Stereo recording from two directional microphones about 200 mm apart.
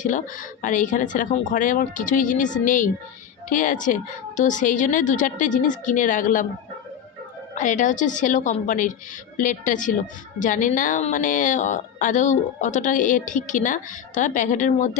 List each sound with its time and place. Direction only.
0.0 s a woman's voice: 40° left (ahead or behind)
7.5 s a woman's voice: 40° left (ahead or behind)